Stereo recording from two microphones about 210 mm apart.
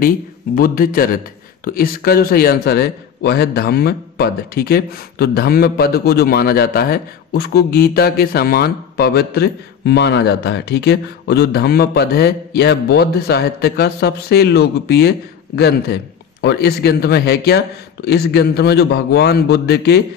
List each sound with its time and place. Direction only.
0.6 s a man's voice: 45° left (ahead or behind)